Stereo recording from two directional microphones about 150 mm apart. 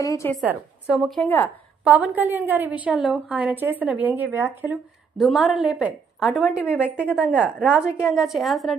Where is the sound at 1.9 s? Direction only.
10° right (ahead or behind).